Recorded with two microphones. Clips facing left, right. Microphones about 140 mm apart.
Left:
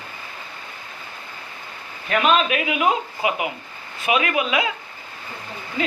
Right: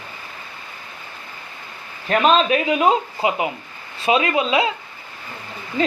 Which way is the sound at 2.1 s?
35° right (ahead or behind).